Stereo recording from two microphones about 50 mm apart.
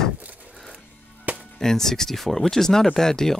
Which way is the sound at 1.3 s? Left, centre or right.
Right.